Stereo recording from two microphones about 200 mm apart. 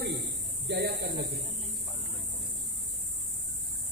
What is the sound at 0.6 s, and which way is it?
Speech, 60° right (ahead or behind).